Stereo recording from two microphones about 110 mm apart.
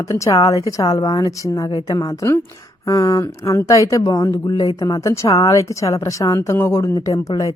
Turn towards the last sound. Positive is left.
turn(degrees=30)  # may be behind; listen again after turning